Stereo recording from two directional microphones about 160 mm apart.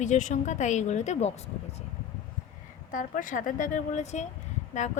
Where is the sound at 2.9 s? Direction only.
55° left (ahead or behind).